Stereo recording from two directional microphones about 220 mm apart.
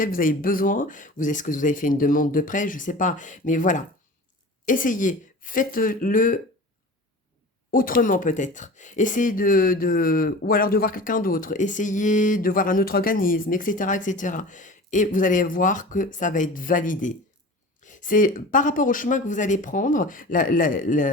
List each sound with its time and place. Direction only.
0.0 s speech: 40° left (ahead or behind)
7.7 s speech: 40° left (ahead or behind)